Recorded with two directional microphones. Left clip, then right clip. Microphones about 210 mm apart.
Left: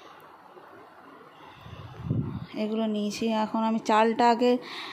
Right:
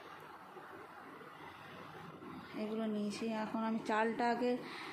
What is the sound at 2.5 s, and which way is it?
Speech, 35° left (ahead or behind).